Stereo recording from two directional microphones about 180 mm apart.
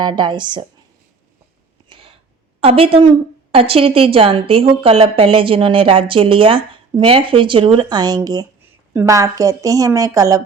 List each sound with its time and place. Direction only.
0.0 s a woman's voice: 25° right (ahead or behind)
2.6 s a woman's voice: 30° right (ahead or behind)